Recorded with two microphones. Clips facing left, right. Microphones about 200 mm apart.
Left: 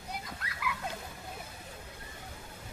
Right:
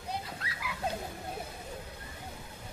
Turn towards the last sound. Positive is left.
turn(degrees=-30)  # may be behind; listen again after turning